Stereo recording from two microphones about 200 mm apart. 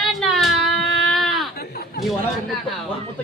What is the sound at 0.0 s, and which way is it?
Baby cry, centre (ahead or behind).